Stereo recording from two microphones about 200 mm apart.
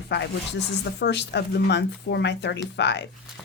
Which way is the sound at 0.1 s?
60° left (ahead or behind).